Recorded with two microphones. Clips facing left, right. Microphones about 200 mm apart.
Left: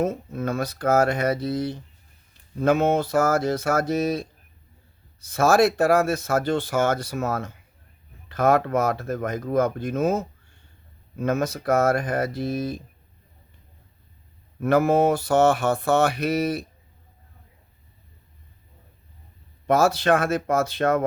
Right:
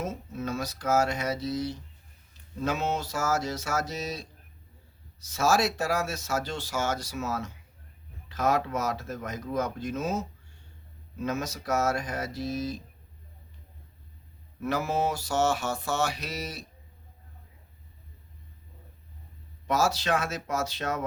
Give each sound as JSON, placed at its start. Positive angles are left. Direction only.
{"t": 0.0, "sound": "speech", "side_deg": 55}
{"t": 14.6, "sound": "speech", "side_deg": 55}
{"t": 19.6, "sound": "speech", "side_deg": 55}